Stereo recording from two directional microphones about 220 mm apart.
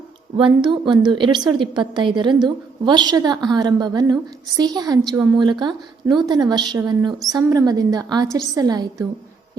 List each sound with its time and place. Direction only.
0.3 s a woman's voice: 20° right (ahead or behind)